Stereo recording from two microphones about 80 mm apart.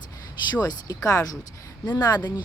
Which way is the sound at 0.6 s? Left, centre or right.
Left.